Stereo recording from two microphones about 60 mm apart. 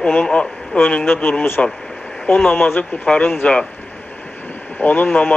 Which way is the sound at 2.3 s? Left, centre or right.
Left.